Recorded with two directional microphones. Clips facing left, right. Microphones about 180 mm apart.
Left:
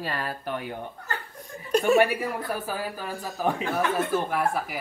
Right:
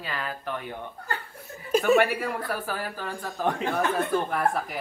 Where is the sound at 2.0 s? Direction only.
15° left (ahead or behind).